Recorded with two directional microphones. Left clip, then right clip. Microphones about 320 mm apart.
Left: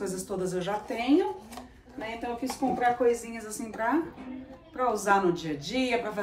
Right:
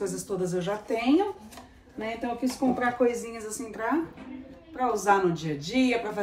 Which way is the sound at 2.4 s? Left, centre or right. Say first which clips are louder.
Even; centre.